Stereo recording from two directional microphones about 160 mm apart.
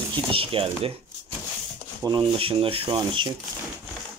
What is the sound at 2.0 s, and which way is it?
Speech, 35° right (ahead or behind).